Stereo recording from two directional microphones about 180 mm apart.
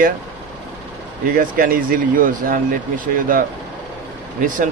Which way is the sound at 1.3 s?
50° right (ahead or behind).